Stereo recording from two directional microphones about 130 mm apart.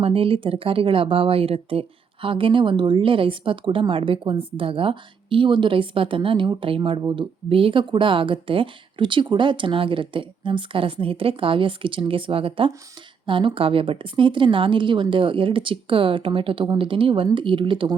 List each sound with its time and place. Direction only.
0.0 s speech: 45° right (ahead or behind)